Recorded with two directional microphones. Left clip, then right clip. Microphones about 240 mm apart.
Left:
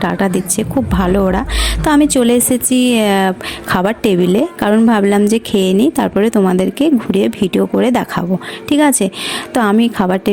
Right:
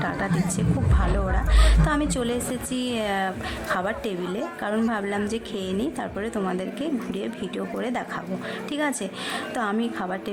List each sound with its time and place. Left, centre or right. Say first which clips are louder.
0.0 s a woman's voice: left 11 dB; left